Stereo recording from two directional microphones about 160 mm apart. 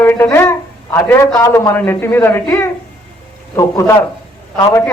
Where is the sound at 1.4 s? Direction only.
20° left (ahead or behind).